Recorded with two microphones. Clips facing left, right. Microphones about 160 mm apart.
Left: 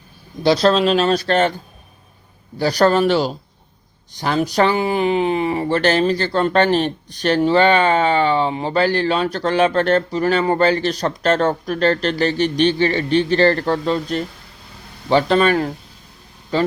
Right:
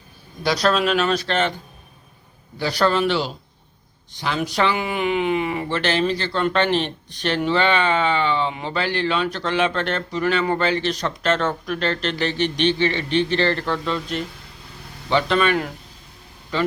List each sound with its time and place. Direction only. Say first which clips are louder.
0.4 s speech: left 5 dB; 30° left (ahead or behind)
2.6 s speech: left 5 dB; 40° left (ahead or behind)